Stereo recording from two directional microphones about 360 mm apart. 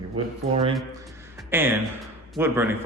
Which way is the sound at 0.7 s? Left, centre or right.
Centre.